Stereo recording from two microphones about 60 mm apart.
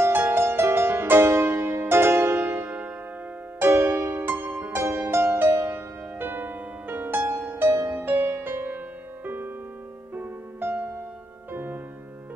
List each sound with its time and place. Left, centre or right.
0.0 s music: right